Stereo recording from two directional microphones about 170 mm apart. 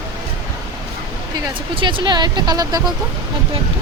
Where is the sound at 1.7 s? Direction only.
30° right (ahead or behind).